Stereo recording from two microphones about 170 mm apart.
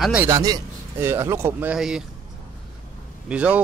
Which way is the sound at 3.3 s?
5° right (ahead or behind).